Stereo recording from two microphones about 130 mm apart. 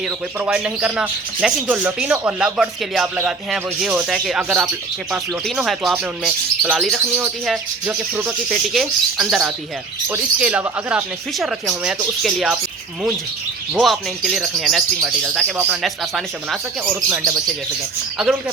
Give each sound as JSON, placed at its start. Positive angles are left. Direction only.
{"t": 0.3, "sound": "speech", "side_deg": -10}
{"t": 8.2, "sound": "speech", "side_deg": 0}
{"t": 10.1, "sound": "speech", "side_deg": -15}
{"t": 13.8, "sound": "speech", "side_deg": 0}
{"t": 15.8, "sound": "speech", "side_deg": 0}
{"t": 16.8, "sound": "speech", "side_deg": -20}